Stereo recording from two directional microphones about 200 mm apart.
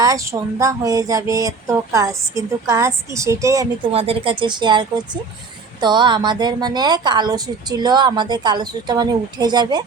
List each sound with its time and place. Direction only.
0.0 s speech: 15° right (ahead or behind)
3.9 s a woman's voice: 30° right (ahead or behind)